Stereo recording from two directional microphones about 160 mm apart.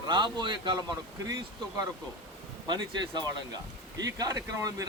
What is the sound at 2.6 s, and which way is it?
Speech, 25° right (ahead or behind).